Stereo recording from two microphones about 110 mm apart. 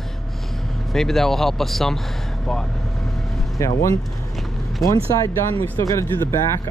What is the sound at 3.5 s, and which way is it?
Speech, 30° left (ahead or behind).